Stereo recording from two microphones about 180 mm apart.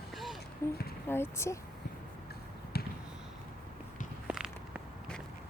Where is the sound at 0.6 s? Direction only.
15° left (ahead or behind).